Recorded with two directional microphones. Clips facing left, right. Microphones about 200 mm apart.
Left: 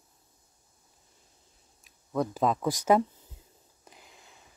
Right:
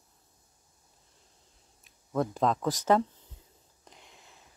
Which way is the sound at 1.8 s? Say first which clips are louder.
Even; centre (ahead or behind).